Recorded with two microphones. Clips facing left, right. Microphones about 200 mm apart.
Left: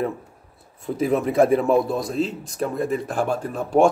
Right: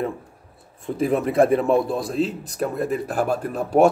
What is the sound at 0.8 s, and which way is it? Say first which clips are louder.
A man's voice: even; centre (ahead or behind).